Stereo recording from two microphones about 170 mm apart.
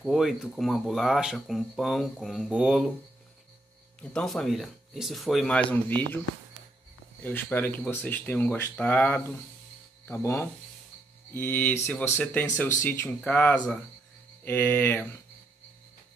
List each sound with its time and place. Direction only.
0.0 s speech: centre (ahead or behind)
4.1 s speech: 5° left (ahead or behind)
7.2 s speech: 10° left (ahead or behind)